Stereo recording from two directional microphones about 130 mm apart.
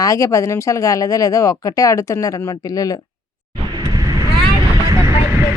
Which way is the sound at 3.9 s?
30° right (ahead or behind).